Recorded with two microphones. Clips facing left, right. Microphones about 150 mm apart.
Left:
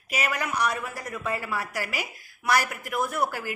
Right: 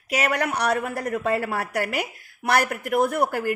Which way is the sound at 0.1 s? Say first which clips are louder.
Right 5 dB; 75° right (ahead or behind).